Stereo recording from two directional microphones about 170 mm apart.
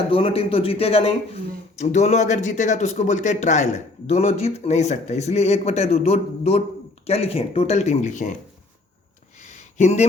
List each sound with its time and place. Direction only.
0.1 s speech: 35° left (ahead or behind)
9.7 s speech: 40° left (ahead or behind)